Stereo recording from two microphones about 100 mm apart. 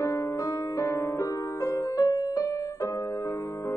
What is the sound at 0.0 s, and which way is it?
Music, 30° left (ahead or behind).